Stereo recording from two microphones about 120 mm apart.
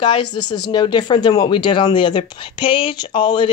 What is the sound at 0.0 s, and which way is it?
Speech, 45° left (ahead or behind).